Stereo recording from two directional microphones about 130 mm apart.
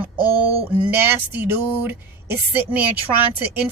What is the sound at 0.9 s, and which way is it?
Speech, 15° right (ahead or behind).